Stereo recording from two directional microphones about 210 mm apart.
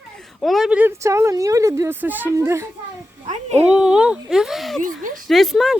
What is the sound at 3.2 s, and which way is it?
Speech, 30° right (ahead or behind).